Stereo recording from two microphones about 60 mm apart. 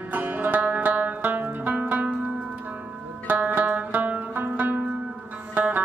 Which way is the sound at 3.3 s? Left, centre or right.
Right.